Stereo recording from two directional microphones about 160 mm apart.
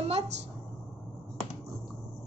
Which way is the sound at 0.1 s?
45° right (ahead or behind).